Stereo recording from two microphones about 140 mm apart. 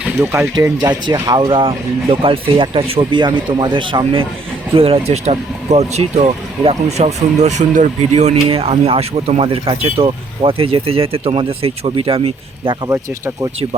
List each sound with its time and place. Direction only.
0.0 s speech: 10° right (ahead or behind)
0.5 s speech: 30° right (ahead or behind)
1.5 s speech: 40° right (ahead or behind)
12.9 s speech: 20° right (ahead or behind)